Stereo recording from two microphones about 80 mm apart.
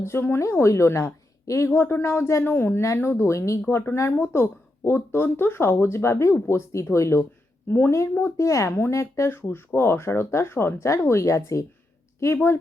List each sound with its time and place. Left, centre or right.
0.0 s a woman's voice: left